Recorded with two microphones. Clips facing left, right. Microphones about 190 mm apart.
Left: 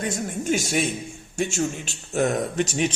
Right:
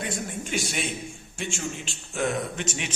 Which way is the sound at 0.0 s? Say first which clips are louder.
Left 5 dB; 45° left (ahead or behind).